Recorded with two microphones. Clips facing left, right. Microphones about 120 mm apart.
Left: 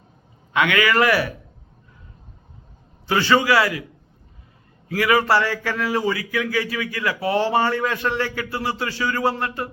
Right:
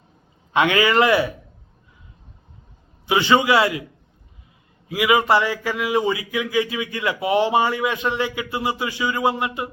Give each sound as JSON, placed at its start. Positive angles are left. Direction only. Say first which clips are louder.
{"t": 0.5, "sound": "speech", "louder": "right 2 dB", "side_deg": -30}
{"t": 3.1, "sound": "speech", "louder": "right 1 dB", "side_deg": -20}
{"t": 4.9, "sound": "speech", "louder": "right 1 dB", "side_deg": -15}